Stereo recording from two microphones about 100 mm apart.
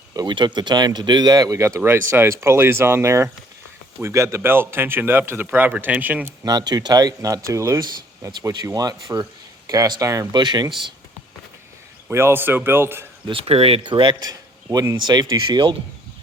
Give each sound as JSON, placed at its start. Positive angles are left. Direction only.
{"t": 0.3, "sound": "speech", "side_deg": -50}
{"t": 6.4, "sound": "speech", "side_deg": -40}
{"t": 10.3, "sound": "speech", "side_deg": -45}
{"t": 12.1, "sound": "speech", "side_deg": -25}
{"t": 13.2, "sound": "speech", "side_deg": -65}
{"t": 13.8, "sound": "speech", "side_deg": -55}